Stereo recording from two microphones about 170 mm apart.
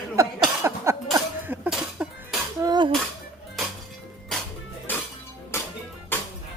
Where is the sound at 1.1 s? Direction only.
10° right (ahead or behind).